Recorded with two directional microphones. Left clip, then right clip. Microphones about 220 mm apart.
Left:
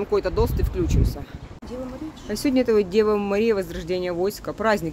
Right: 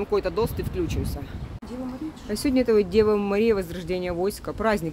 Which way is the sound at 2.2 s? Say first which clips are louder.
Left 1 dB; centre (ahead or behind).